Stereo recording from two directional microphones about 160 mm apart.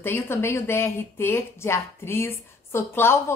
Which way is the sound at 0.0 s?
15° left (ahead or behind).